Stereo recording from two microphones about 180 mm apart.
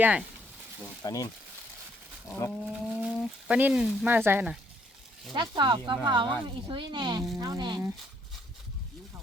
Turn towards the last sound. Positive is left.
turn(degrees=-25)  # may be behind; listen again after turning